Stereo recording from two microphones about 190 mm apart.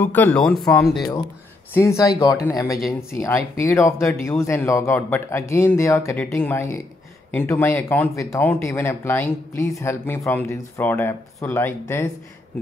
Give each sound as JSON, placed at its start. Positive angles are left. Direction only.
{"t": 0.0, "sound": "speech", "side_deg": 10}
{"t": 1.7, "sound": "speech", "side_deg": 15}